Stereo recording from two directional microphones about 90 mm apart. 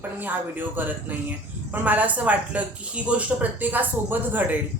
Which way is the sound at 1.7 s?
20° right (ahead or behind).